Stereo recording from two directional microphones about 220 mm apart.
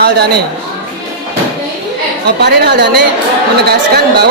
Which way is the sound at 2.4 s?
50° right (ahead or behind).